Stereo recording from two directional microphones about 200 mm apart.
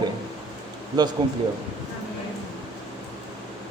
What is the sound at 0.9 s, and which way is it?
Speech, 20° right (ahead or behind).